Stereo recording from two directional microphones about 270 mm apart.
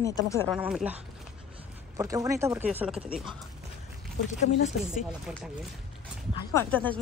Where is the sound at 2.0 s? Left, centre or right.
Centre.